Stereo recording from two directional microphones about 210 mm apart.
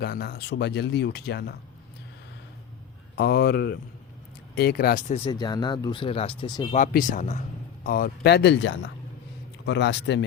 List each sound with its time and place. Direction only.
0.0 s speech: 50° left (ahead or behind)
3.2 s speech: 50° left (ahead or behind)
5.2 s speech: 20° left (ahead or behind)
6.7 s speech: 40° left (ahead or behind); by 10.2 s 55° left (ahead or behind)